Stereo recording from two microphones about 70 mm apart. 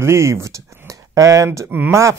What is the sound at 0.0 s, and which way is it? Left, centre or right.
Speech, right.